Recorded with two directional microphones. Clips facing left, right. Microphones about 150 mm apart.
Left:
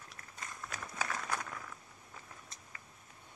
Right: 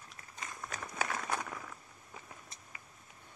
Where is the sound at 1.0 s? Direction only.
25° right (ahead or behind).